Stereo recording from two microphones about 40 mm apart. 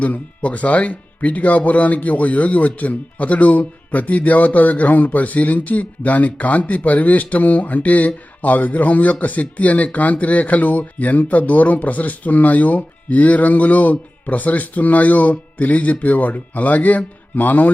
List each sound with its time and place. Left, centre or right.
0.0 s speech: left